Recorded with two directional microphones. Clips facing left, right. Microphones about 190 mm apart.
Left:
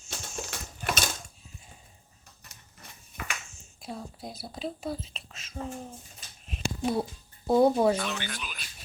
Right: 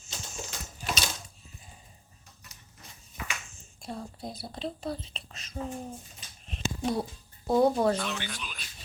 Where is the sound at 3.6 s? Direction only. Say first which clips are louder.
Right 2 dB; centre (ahead or behind).